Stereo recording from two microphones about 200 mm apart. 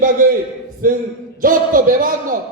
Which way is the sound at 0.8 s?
45° right (ahead or behind).